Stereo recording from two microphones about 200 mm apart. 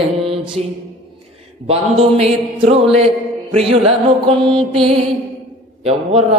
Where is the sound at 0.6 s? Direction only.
35° right (ahead or behind).